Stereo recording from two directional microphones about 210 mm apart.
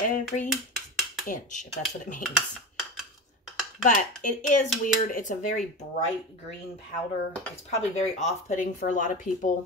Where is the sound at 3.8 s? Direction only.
35° left (ahead or behind).